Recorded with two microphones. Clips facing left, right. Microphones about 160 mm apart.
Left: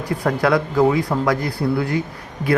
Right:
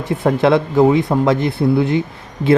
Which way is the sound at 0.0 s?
25° right (ahead or behind).